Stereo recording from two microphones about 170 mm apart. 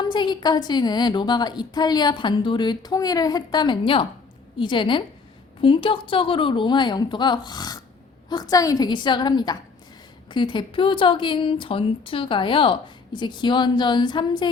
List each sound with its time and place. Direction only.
0.0 s speech: 25° left (ahead or behind)